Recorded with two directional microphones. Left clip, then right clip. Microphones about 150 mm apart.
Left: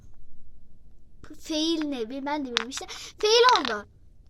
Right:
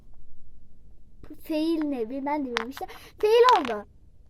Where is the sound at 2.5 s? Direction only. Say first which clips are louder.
Left 1 dB; 30° right (ahead or behind).